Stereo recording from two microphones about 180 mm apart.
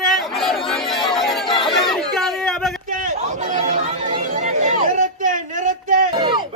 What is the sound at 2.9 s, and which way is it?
Chatter, 45° right (ahead or behind).